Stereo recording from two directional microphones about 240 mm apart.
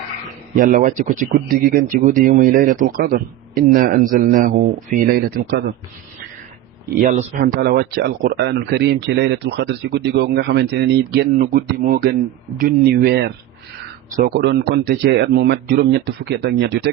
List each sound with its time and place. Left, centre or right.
0.5 s speech: right
7.0 s speech: right